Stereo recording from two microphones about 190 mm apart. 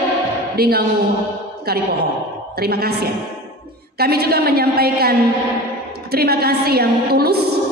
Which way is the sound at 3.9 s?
55° right (ahead or behind).